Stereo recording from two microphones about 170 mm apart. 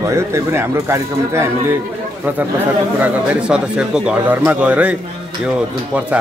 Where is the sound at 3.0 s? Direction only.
5° right (ahead or behind).